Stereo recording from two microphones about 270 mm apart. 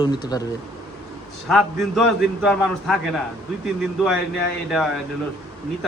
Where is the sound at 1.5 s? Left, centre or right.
Centre.